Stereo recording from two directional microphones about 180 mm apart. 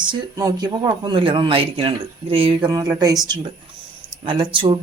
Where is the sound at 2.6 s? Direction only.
20° right (ahead or behind).